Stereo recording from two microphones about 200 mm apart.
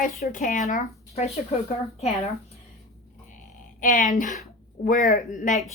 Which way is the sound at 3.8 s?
40° left (ahead or behind).